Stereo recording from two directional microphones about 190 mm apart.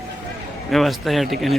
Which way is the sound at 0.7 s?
Centre (ahead or behind).